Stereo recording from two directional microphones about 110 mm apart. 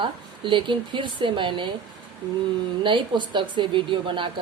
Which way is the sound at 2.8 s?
45° right (ahead or behind).